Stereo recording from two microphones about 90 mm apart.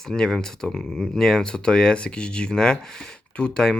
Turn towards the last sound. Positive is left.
turn(degrees=10)  # may be behind; listen again after turning